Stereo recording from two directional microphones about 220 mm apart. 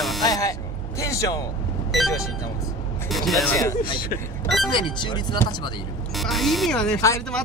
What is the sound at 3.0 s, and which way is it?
Speech, centre (ahead or behind).